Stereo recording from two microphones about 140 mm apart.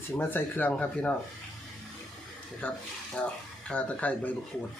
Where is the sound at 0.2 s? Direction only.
15° left (ahead or behind).